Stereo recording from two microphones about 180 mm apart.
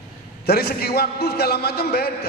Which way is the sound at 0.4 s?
60° left (ahead or behind).